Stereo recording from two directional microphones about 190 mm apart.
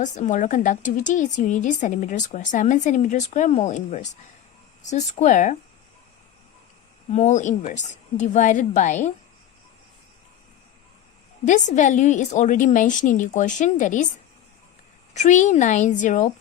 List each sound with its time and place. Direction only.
0.0 s speech: 40° left (ahead or behind)
7.1 s speech: 40° left (ahead or behind)
11.4 s speech: 40° left (ahead or behind)
15.1 s speech: 40° left (ahead or behind)